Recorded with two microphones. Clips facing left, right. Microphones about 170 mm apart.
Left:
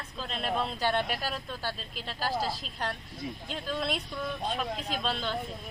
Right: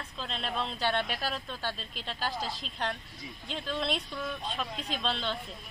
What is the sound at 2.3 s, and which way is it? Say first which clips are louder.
Speech: left 5 dB; 40° left (ahead or behind).